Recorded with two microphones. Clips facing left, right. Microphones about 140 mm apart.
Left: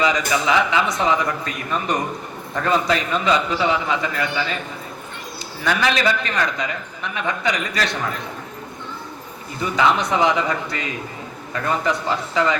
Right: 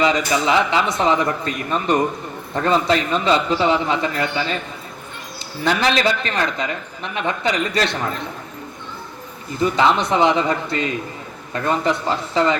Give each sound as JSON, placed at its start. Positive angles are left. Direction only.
{"t": 0.4, "sound": "speech", "side_deg": -30}
{"t": 5.6, "sound": "speech", "side_deg": -30}
{"t": 9.6, "sound": "speech", "side_deg": -30}